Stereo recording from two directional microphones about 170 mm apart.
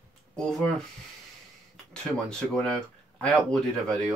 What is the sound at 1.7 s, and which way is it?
Speech, 5° left (ahead or behind).